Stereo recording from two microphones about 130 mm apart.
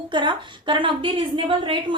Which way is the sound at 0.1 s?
40° right (ahead or behind).